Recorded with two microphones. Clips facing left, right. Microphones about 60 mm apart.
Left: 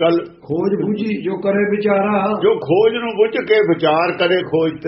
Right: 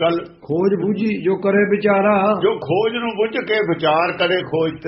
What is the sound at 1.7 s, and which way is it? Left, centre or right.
Mantra, right.